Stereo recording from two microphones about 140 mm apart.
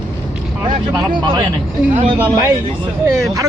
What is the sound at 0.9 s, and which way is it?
Speech, 35° right (ahead or behind).